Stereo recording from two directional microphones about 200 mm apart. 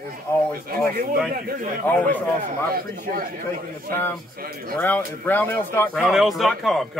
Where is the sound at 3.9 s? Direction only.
10° left (ahead or behind).